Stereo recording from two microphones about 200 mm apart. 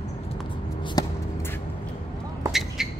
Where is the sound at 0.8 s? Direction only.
25° left (ahead or behind).